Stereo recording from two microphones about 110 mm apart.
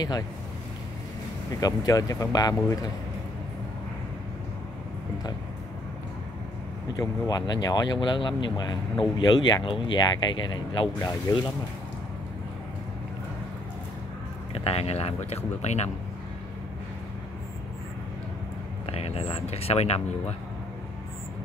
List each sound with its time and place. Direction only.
1.6 s speech: 35° left (ahead or behind)
6.9 s speech: 35° left (ahead or behind)
11.3 s speech: 30° left (ahead or behind)
14.5 s speech: 65° left (ahead or behind); by 15.9 s 85° left
18.9 s speech: 65° left (ahead or behind)